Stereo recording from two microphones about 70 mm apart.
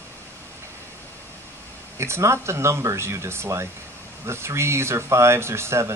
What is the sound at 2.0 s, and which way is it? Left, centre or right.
Speech, right.